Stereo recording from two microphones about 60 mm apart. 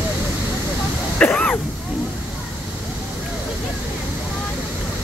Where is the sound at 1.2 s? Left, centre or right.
Left.